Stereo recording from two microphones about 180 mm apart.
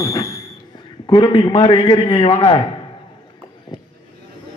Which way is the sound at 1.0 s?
30° left (ahead or behind).